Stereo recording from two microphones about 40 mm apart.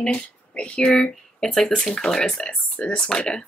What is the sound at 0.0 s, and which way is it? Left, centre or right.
Speech, left.